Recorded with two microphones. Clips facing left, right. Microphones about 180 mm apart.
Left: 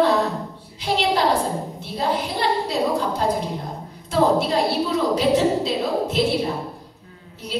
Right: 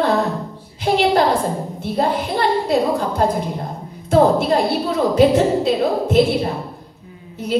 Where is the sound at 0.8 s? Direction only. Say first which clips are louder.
Right 5 dB; 55° right (ahead or behind).